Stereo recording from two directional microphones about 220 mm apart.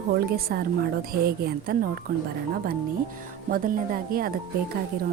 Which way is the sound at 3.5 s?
40° right (ahead or behind).